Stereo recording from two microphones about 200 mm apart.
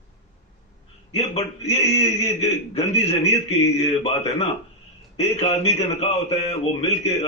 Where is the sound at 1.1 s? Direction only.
30° left (ahead or behind).